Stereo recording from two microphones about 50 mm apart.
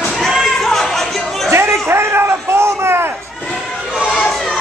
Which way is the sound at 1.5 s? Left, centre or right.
Right.